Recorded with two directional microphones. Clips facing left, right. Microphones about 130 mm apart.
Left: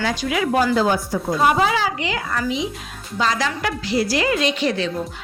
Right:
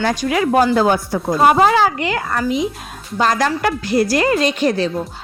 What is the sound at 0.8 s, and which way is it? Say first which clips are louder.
A woman's voice: right 3 dB; 60° right (ahead or behind).